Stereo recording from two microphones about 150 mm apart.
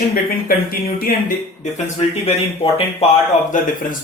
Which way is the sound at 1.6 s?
50° left (ahead or behind).